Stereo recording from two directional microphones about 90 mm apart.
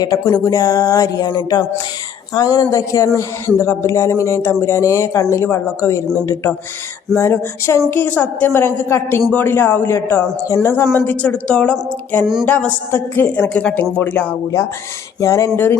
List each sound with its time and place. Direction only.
0.4 s a sound: 40° left (ahead or behind)
1.3 s a sound: 55° left (ahead or behind)
2.3 s speech: 45° left (ahead or behind)
7.2 s speech: 30° left (ahead or behind)
7.9 s a woman's voice: 20° left (ahead or behind)
12.2 s music: 5° right (ahead or behind)
12.5 s speech: 15° left (ahead or behind)
15.2 s speech: 35° left (ahead or behind)